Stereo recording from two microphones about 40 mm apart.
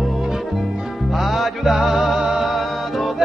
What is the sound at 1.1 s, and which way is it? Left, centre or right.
Music, centre.